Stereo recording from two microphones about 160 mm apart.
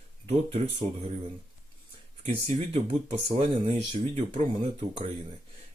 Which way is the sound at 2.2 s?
40° right (ahead or behind).